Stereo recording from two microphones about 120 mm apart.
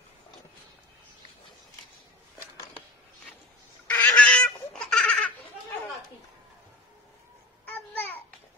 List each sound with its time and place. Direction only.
3.9 s fowl: 10° left (ahead or behind)
7.6 s babbling: 15° left (ahead or behind)